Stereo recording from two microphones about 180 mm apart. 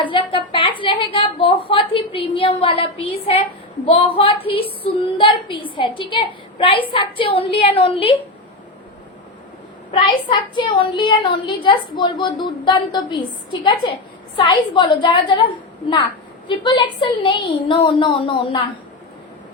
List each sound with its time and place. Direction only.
0.0 s a woman's voice: 30° left (ahead or behind)
9.9 s speech: 25° left (ahead or behind)
16.5 s speech: 25° left (ahead or behind)